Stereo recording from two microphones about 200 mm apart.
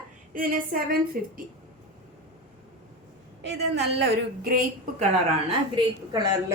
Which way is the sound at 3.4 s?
60° right (ahead or behind).